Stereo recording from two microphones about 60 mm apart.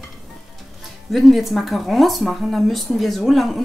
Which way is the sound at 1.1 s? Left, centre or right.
Centre.